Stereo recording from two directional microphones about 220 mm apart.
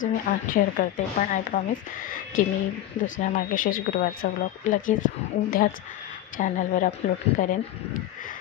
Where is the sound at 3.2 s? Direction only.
35° left (ahead or behind).